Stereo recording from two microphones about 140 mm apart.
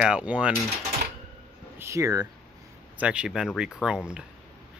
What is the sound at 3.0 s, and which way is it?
Speech, 5° right (ahead or behind).